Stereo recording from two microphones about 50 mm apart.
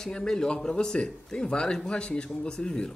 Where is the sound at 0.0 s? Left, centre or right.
Centre.